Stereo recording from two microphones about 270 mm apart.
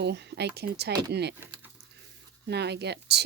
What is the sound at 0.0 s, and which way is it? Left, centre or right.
Speech, right.